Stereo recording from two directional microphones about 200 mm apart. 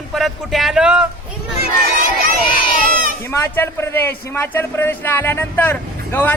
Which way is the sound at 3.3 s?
10° left (ahead or behind).